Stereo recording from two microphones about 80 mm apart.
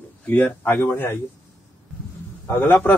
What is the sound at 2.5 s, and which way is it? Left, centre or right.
Speech, left.